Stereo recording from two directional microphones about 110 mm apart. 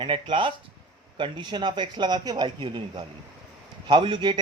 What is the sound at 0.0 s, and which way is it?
Speech, 50° right (ahead or behind).